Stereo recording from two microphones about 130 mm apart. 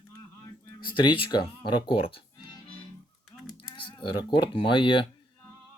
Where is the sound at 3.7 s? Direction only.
40° left (ahead or behind).